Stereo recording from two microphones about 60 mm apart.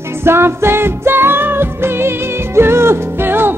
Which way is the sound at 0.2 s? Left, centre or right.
Right.